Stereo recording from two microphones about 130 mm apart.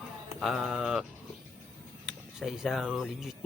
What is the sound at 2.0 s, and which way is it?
Speech, 5° right (ahead or behind).